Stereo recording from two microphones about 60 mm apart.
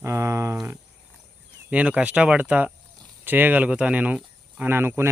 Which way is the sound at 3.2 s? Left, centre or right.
Right.